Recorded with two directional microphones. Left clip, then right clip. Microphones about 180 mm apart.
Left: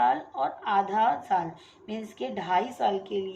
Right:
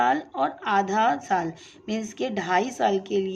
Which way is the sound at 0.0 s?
45° right (ahead or behind).